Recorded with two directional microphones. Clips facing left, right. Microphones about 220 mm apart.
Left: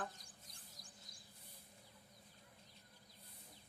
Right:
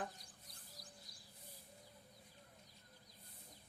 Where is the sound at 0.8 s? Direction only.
20° left (ahead or behind).